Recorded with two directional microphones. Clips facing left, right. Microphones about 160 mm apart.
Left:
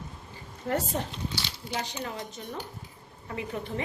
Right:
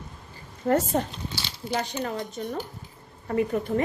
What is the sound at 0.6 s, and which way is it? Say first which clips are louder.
A woman's voice: right 7 dB; 45° right (ahead or behind).